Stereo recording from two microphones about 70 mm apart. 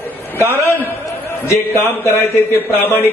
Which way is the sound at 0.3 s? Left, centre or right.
Right.